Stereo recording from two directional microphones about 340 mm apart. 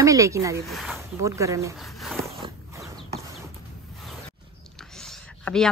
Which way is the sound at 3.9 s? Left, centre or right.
Centre.